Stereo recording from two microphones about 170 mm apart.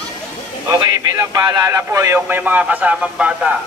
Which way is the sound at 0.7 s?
20° right (ahead or behind).